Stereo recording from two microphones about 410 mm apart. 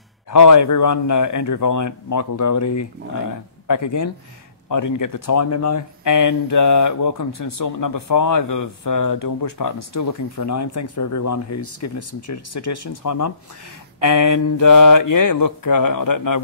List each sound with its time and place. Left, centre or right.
0.3 s speech: left